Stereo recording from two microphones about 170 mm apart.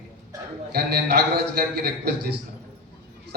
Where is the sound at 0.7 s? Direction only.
65° right (ahead or behind).